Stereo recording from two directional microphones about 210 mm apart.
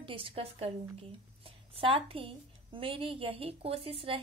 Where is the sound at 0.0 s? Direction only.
25° right (ahead or behind).